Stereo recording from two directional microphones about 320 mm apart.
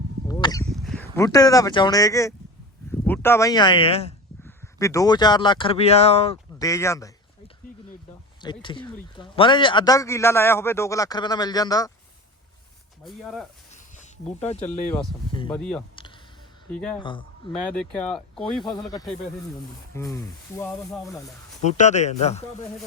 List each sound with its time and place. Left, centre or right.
0.3 s a sound: centre
0.7 s a man's voice: centre
13.1 s speech: centre
14.3 s speech: centre
14.6 s speech: centre
15.3 s speech: centre
15.5 s speech: centre
17.0 s a man's voice: centre
18.6 s a man's voice: centre
21.6 s speech: left